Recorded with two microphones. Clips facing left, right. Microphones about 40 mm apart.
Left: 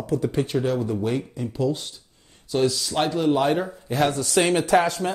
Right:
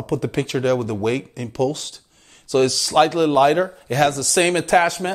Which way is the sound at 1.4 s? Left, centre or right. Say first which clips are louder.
Right 3 dB; right.